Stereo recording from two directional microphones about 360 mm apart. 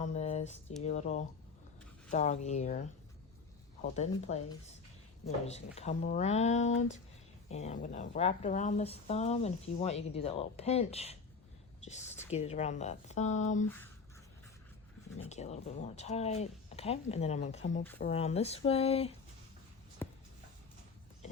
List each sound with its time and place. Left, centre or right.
0.0 s speech: centre
3.9 s speech: centre
13.7 s speech: centre
15.3 s speech: centre
20.0 s a sound: centre